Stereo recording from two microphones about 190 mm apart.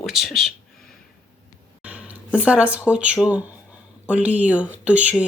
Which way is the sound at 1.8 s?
5° right (ahead or behind).